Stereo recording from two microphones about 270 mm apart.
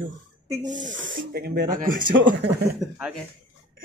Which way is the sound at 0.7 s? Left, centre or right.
Right.